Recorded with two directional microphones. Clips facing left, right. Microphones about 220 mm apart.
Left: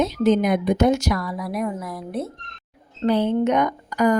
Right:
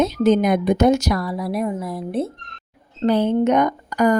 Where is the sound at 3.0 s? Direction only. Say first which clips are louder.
Right 2 dB; 45° right (ahead or behind).